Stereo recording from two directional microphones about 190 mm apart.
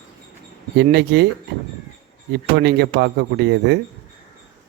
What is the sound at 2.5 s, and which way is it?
Speech, 55° right (ahead or behind).